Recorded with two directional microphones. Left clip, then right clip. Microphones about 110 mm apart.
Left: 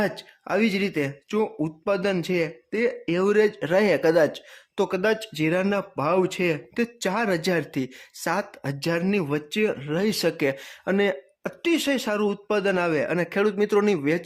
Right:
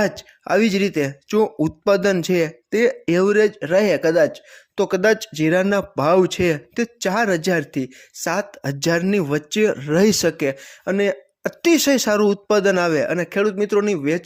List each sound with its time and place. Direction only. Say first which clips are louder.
0.0 s speech: right 5 dB; 35° right (ahead or behind)
3.2 s speech: right 2 dB; 20° right (ahead or behind)
4.9 s speech: right 9 dB; 35° right (ahead or behind)
7.7 s speech: right 3 dB; 10° right (ahead or behind)
8.3 s speech: right 4 dB; 20° right (ahead or behind)
8.8 s speech: right 6 dB; 40° right (ahead or behind)
10.5 s speech: right 3 dB; 10° right (ahead or behind)
11.6 s speech: right 7 dB; 50° right (ahead or behind); by 13.1 s 30° right (ahead or behind)
13.1 s speech: right 3 dB; 20° right (ahead or behind)